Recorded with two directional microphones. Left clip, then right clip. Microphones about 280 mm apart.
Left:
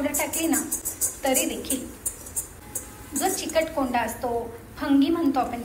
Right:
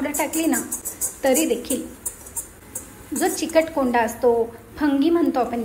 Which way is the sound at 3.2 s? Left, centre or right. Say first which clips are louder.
Right 5 dB; centre.